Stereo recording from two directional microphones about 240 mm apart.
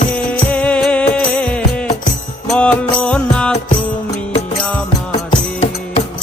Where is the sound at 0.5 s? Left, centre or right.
Centre.